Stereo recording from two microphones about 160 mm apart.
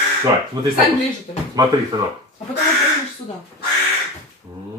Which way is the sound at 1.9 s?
25° right (ahead or behind).